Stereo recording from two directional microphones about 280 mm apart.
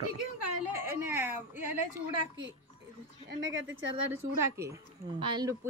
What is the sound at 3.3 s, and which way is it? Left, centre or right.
Speech, right.